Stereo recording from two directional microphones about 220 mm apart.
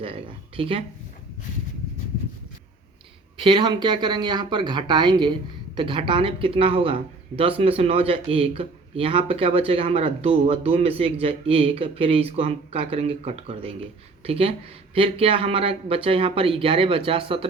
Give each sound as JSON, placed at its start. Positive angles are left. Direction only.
{"t": 0.0, "sound": "speech", "side_deg": -25}
{"t": 3.3, "sound": "speech", "side_deg": -25}